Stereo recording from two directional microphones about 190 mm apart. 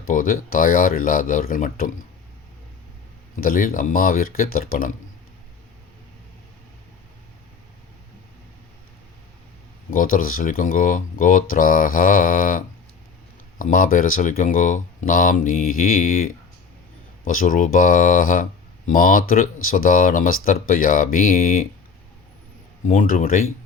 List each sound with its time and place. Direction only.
0.1 s speech: 45° left (ahead or behind)
3.4 s speech: 50° left (ahead or behind)
9.9 s speech: 45° left (ahead or behind)
17.2 s speech: 45° left (ahead or behind)
22.9 s speech: 45° left (ahead or behind)